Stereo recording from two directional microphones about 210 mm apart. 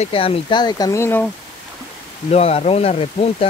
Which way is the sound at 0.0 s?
25° left (ahead or behind).